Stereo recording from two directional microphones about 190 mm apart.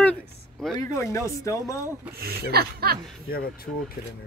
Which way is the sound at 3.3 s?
55° left (ahead or behind).